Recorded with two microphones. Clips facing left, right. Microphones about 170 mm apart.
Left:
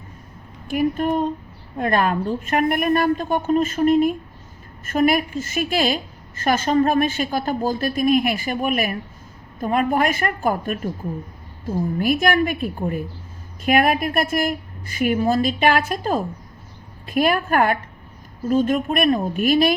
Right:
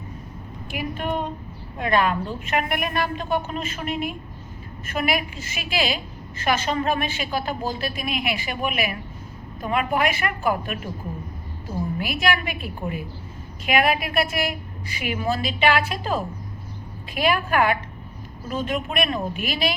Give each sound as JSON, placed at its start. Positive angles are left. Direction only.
{"t": 0.7, "sound": "a woman's voice", "side_deg": 45}
{"t": 11.9, "sound": "a woman's voice", "side_deg": 45}